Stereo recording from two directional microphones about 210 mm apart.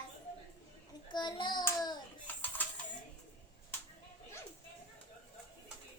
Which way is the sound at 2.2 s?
10° left (ahead or behind).